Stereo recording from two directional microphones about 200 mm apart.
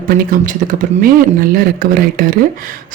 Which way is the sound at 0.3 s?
40° right (ahead or behind).